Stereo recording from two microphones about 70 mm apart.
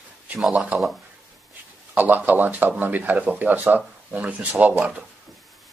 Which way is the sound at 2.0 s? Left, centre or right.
Right.